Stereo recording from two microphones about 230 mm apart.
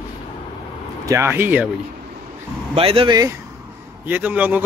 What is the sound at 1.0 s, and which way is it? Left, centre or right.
Speech, centre.